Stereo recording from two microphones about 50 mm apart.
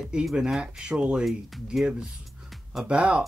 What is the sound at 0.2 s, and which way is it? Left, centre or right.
Speech, centre.